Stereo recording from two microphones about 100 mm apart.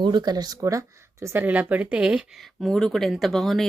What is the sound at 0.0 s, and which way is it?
Speech, 45° right (ahead or behind).